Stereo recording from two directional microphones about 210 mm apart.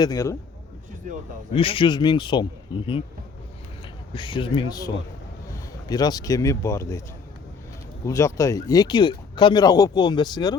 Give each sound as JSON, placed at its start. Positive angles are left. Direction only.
{"t": 0.0, "sound": "a man's voice", "side_deg": 15}
{"t": 1.0, "sound": "a man's voice", "side_deg": -40}
{"t": 1.5, "sound": "speech", "side_deg": 25}
{"t": 4.1, "sound": "speech", "side_deg": 25}
{"t": 8.0, "sound": "speech", "side_deg": 15}